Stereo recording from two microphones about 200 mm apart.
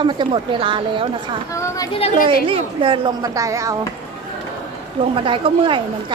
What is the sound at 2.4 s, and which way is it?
A man's voice, 25° right (ahead or behind).